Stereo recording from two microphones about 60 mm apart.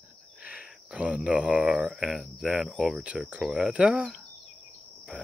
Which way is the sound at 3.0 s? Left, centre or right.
Centre.